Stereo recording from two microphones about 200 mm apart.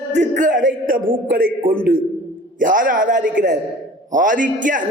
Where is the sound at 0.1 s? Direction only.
40° right (ahead or behind).